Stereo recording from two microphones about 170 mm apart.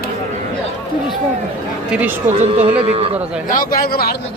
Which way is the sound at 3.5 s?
55° left (ahead or behind).